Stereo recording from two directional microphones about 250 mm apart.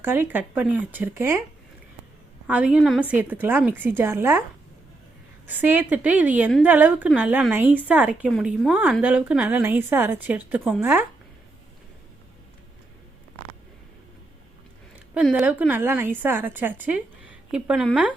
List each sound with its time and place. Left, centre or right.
0.0 s a woman's voice: centre
2.5 s a woman's voice: centre
5.5 s a woman's voice: centre
15.1 s a woman's voice: centre